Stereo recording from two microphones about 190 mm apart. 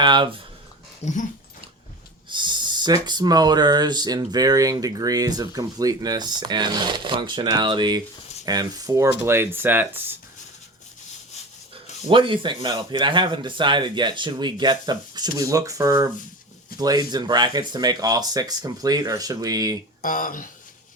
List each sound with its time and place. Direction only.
0.0 s speech: 25° right (ahead or behind)
1.0 s speech: 35° left (ahead or behind)
2.3 s speech: 25° right (ahead or behind)
12.0 s speech: 25° right (ahead or behind)
20.0 s speech: 45° left (ahead or behind)